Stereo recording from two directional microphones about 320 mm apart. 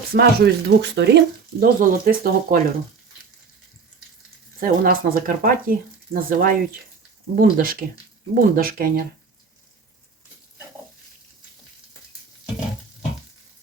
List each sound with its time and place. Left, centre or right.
0.1 s speech: right
4.6 s speech: right